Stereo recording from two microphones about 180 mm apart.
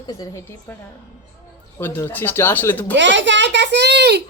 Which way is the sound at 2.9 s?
85° right.